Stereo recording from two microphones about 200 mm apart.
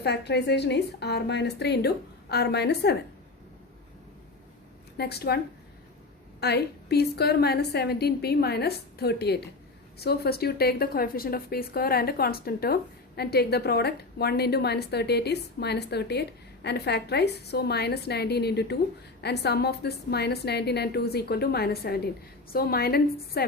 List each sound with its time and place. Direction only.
0.0 s a woman's voice: 55° left (ahead or behind)
4.9 s a woman's voice: 55° left (ahead or behind)
6.4 s a woman's voice: 55° left (ahead or behind)